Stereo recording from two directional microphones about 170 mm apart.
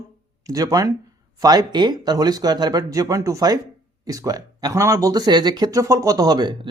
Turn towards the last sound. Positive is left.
turn(degrees=-25)  # may be behind; listen again after turning